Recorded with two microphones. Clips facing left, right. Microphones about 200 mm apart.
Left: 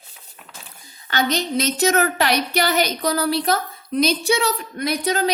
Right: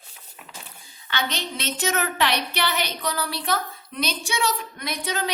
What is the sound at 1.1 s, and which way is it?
A woman's voice, 40° left (ahead or behind).